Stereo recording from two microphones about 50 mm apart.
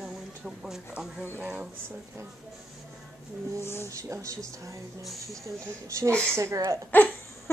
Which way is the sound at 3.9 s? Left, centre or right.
Right.